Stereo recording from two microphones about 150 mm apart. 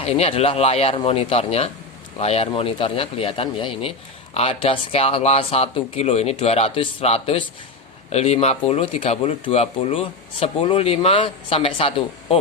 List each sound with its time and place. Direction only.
0.0 s a man's voice: 45° left (ahead or behind)